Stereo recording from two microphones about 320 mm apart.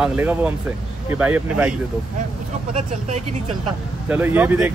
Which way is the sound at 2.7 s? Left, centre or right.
Right.